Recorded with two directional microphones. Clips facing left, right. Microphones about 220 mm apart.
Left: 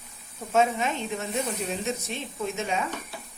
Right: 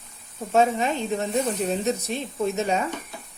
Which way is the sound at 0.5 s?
35° right (ahead or behind).